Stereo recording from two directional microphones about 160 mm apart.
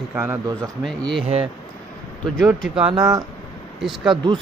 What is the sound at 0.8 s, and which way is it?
Speech, 5° left (ahead or behind).